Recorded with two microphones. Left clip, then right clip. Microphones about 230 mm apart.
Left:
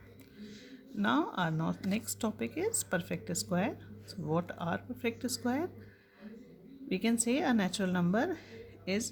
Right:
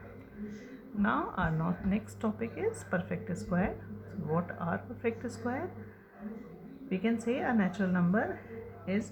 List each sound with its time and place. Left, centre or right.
1.0 s speech: left
6.8 s speech: left